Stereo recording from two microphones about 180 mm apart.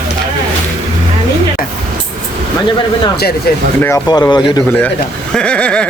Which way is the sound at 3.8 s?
20° left (ahead or behind).